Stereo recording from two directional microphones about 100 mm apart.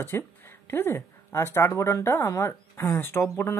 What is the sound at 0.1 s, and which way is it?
A woman's voice, 25° left (ahead or behind).